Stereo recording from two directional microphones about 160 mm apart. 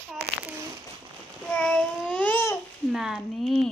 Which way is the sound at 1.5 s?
5° left (ahead or behind).